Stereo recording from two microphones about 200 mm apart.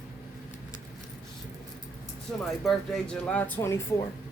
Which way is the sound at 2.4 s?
Centre (ahead or behind).